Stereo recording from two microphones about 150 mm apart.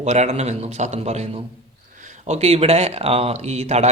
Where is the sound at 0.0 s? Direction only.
50° right (ahead or behind).